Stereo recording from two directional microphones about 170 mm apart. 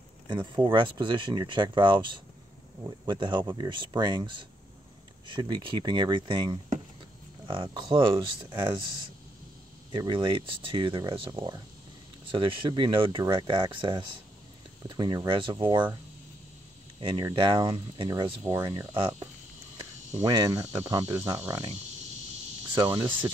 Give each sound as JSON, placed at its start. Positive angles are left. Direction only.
{"t": 0.4, "sound": "speech", "side_deg": -25}
{"t": 9.9, "sound": "speech", "side_deg": -30}
{"t": 17.2, "sound": "speech", "side_deg": -25}
{"t": 18.4, "sound": "speech", "side_deg": -20}
{"t": 22.8, "sound": "speech", "side_deg": -20}